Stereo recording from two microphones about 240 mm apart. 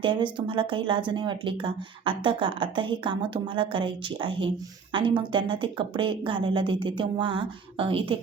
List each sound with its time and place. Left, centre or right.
0.0 s speech: right